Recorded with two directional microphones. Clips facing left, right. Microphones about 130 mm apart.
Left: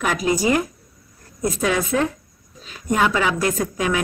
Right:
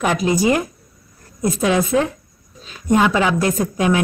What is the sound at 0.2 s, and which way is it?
A woman's voice, 25° right (ahead or behind).